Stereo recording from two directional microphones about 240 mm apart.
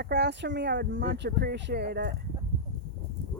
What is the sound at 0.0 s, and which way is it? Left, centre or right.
Speech, right.